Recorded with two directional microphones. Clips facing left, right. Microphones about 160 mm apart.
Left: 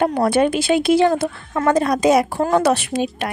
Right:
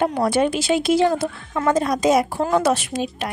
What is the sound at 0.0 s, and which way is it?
A woman's voice, 55° left (ahead or behind).